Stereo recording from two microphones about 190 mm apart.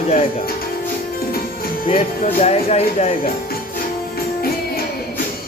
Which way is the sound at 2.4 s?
35° left (ahead or behind).